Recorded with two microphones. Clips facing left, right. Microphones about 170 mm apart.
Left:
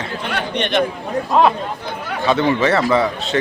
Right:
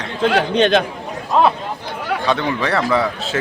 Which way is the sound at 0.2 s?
90° right.